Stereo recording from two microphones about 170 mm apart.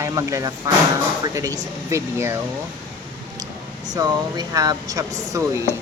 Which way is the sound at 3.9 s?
20° right (ahead or behind).